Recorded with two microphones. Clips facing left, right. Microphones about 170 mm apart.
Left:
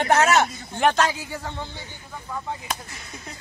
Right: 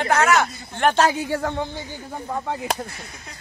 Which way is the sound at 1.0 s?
65° right (ahead or behind).